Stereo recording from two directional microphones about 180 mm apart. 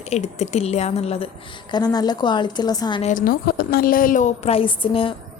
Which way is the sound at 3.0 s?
45° left (ahead or behind).